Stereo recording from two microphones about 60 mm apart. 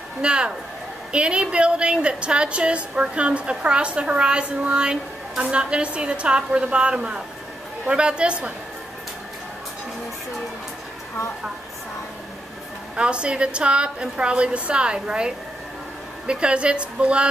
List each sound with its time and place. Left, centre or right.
0.2 s a woman's voice: centre
12.9 s a woman's voice: centre